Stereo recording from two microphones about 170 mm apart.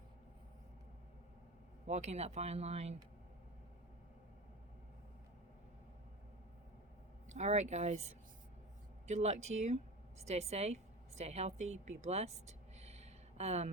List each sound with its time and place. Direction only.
1.9 s speech: 40° right (ahead or behind)
7.3 s speech: 40° right (ahead or behind)